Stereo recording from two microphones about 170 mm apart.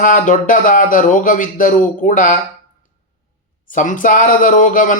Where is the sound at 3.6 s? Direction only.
50° left (ahead or behind).